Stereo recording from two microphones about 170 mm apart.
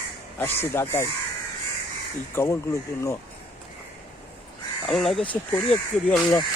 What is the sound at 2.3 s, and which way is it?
Speech, 15° left (ahead or behind).